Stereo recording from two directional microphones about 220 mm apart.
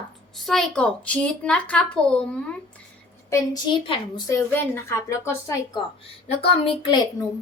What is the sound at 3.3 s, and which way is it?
A woman's voice, 15° left (ahead or behind).